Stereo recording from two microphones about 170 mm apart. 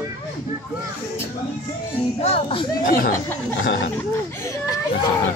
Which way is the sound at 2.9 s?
55° left (ahead or behind).